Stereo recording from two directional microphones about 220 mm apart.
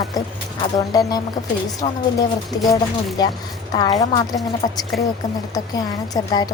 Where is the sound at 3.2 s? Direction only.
20° left (ahead or behind).